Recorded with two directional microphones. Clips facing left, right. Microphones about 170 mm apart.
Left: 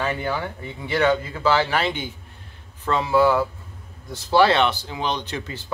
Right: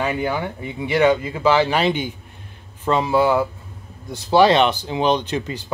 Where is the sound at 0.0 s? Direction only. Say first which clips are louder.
Right 3 dB; 10° right (ahead or behind).